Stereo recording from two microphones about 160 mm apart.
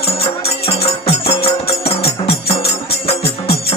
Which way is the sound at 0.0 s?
40° left (ahead or behind).